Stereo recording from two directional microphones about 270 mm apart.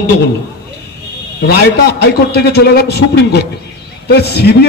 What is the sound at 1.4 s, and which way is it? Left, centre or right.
A man's voice, left.